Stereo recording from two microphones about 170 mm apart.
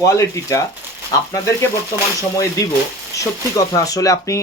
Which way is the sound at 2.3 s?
20° left (ahead or behind).